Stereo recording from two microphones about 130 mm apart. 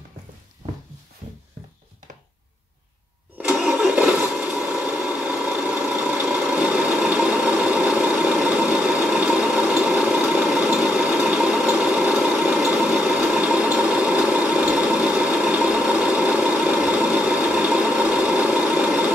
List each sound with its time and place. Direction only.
3.3 s engine starting: 15° right (ahead or behind)
3.8 s a sound: 10° right (ahead or behind)
6.2 s engine: 10° right (ahead or behind)
10.5 s a sound: 5° right (ahead or behind)
11.7 s vehicle: 5° right (ahead or behind)
12.4 s engine: 5° right (ahead or behind)